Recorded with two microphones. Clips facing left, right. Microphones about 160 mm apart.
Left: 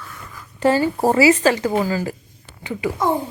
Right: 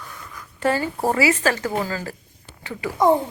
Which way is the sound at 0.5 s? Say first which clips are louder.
Left 5 dB; 25° left (ahead or behind).